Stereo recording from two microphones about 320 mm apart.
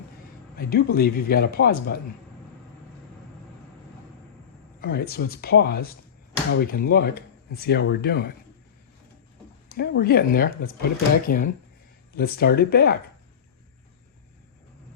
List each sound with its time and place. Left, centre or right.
0.5 s speech: left
4.8 s speech: left
9.6 s speech: left